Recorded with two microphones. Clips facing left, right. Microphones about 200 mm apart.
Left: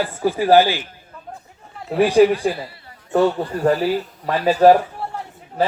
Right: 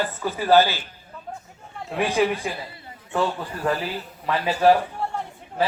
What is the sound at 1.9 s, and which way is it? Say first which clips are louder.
Speech: left 8 dB; 35° left (ahead or behind).